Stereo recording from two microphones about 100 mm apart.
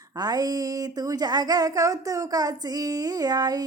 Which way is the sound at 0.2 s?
40° right (ahead or behind).